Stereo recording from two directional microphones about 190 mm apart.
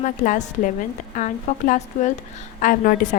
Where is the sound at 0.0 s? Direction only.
40° left (ahead or behind).